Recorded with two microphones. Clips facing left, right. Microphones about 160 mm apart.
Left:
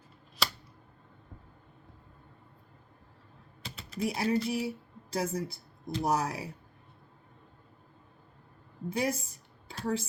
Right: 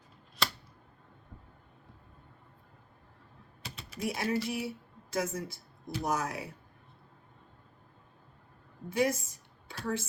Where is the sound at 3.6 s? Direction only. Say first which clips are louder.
Left 1 dB; 5° right (ahead or behind).